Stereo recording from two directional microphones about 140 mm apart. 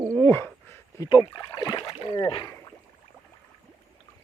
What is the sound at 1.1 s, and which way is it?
Speech, 30° left (ahead or behind).